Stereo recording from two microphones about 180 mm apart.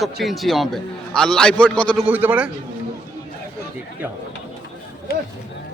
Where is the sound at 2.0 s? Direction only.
10° right (ahead or behind).